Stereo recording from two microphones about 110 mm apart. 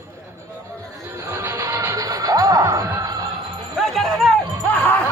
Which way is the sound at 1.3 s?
20° right (ahead or behind).